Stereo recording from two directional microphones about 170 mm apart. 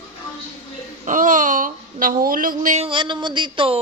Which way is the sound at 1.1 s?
50° right (ahead or behind).